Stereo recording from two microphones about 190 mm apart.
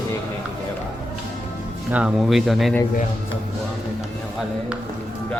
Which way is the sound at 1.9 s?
5° right (ahead or behind).